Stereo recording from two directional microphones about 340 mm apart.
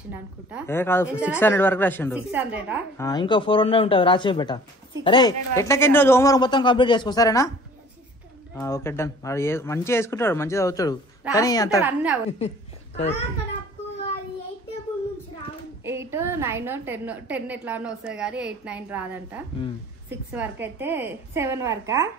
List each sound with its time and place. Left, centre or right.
0.7 s a man's voice: centre
2.4 s a woman's voice: centre
3.0 s a man's voice: centre
8.5 s a man's voice: centre
11.8 s a woman's voice: centre
12.3 s a man's voice: centre
15.8 s a woman's voice: centre